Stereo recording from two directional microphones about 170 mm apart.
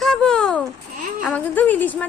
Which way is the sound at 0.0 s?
5° left (ahead or behind).